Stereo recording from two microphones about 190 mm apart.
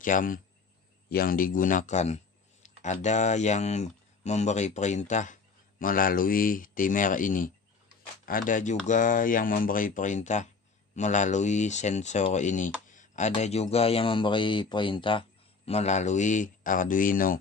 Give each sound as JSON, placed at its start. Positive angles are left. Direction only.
{"t": 0.0, "sound": "a man's voice", "side_deg": 45}